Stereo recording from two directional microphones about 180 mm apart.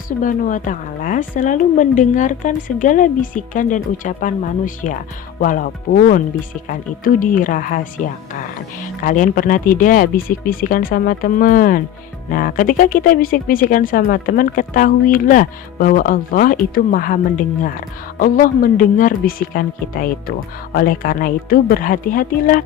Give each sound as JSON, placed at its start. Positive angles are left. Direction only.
{"t": 0.2, "sound": "speech", "side_deg": 45}